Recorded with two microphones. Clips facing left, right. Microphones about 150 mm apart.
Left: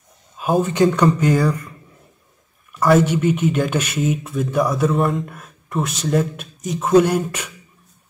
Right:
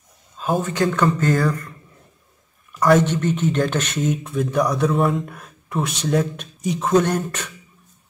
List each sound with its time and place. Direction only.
0.4 s speech: 15° left (ahead or behind)
1.0 s speech: 10° left (ahead or behind)
2.7 s speech: 5° left (ahead or behind)